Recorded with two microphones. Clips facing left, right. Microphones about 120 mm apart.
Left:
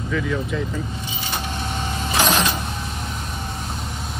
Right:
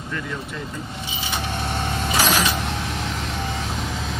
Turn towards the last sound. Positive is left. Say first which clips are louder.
# left 1 dB
turn(degrees=-5)  # may be behind; listen again after turning